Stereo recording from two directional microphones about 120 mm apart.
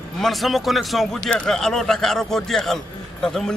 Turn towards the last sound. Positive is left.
turn(degrees=5)  # may be behind; listen again after turning